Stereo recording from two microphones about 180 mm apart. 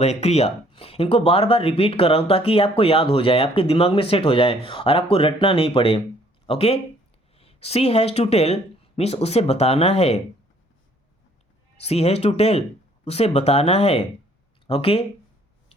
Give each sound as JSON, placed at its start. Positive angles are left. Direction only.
{"t": 0.0, "sound": "speech", "side_deg": 35}
{"t": 11.8, "sound": "speech", "side_deg": 35}